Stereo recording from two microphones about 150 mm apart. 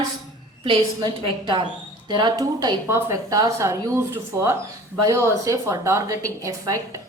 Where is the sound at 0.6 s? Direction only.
30° right (ahead or behind).